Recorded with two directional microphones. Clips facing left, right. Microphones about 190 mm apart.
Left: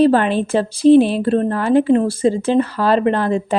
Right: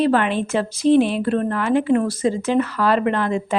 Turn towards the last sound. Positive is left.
turn(degrees=35)  # may be behind; listen again after turning